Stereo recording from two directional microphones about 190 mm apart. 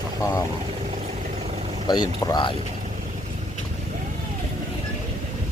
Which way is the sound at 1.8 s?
25° left (ahead or behind).